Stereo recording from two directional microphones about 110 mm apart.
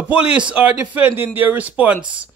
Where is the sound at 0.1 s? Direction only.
10° right (ahead or behind).